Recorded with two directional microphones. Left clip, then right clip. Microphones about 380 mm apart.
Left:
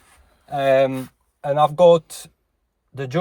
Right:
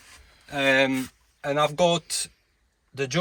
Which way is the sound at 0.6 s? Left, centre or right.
Centre.